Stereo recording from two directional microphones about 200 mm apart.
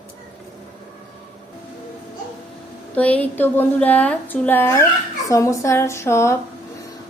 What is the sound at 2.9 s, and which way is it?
A woman's voice, 5° left (ahead or behind).